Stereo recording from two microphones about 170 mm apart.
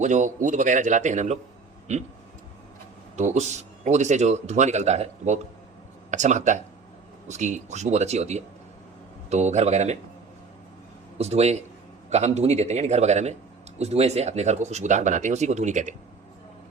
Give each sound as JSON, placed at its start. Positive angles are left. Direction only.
{"t": 0.0, "sound": "a man's voice", "side_deg": -45}
{"t": 3.2, "sound": "a man's voice", "side_deg": -40}
{"t": 11.2, "sound": "speech", "side_deg": -40}